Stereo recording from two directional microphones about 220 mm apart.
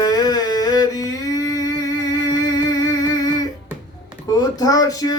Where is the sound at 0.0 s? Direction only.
15° left (ahead or behind).